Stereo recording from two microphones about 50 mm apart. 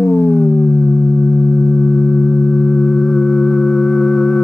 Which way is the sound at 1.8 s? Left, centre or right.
Centre.